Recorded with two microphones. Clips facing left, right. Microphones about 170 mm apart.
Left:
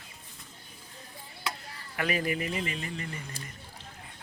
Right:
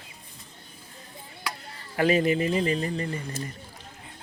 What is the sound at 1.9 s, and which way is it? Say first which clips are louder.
A man's voice: right 8 dB; 30° right (ahead or behind).